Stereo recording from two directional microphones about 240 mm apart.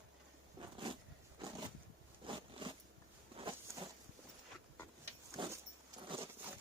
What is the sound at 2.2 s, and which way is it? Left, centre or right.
Biting, right.